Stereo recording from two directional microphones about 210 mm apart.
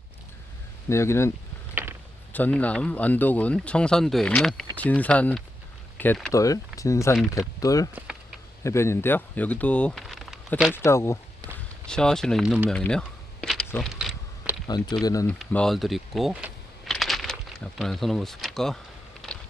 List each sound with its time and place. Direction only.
0.9 s speech: 15° left (ahead or behind)
1.7 s a sound: 10° right (ahead or behind)
2.3 s speech: 5° left (ahead or behind)
10.7 s speech: 10° left (ahead or behind)
11.9 s a sound: 5° left (ahead or behind)
15.0 s speech: 15° left (ahead or behind)
15.3 s typing: 5° left (ahead or behind)
17.7 s speech: centre (ahead or behind)